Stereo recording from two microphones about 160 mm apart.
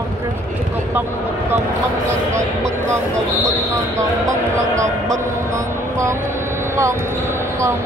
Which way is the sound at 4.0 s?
20° right (ahead or behind).